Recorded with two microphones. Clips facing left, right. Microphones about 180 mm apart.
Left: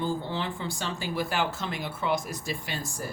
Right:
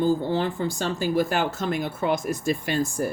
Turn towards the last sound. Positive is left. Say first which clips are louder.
# right 11 dB
turn(degrees=-50)  # may be behind; listen again after turning